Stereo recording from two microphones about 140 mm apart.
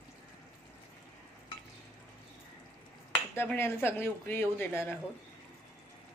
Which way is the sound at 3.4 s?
15° left (ahead or behind).